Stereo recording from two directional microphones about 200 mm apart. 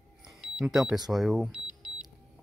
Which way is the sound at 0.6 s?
Centre (ahead or behind).